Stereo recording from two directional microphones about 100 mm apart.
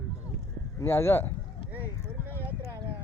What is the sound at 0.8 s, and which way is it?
Speech, 25° left (ahead or behind).